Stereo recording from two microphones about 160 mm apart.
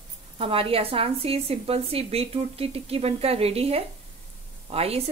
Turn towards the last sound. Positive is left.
turn(degrees=-40)  # may be behind; listen again after turning